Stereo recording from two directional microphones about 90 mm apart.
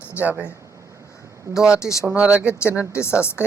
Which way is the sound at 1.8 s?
35° left (ahead or behind).